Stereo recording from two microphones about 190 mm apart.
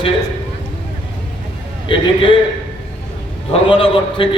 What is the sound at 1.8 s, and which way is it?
Speech, 25° left (ahead or behind).